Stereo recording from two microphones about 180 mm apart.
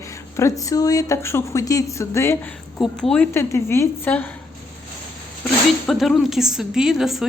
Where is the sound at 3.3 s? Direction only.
15° left (ahead or behind).